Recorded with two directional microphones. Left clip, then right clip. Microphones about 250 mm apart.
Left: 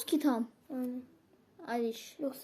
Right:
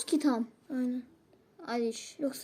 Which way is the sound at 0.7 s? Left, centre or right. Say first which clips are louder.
Right 5 dB; right.